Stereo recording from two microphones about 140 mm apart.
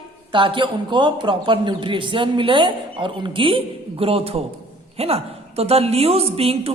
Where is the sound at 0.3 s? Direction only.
35° right (ahead or behind).